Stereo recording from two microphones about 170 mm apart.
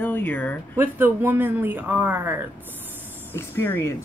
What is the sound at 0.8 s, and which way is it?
Speech, 10° right (ahead or behind).